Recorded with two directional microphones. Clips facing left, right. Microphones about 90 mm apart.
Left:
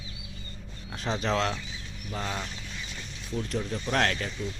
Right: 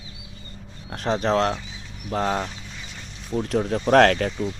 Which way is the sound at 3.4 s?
70° right (ahead or behind).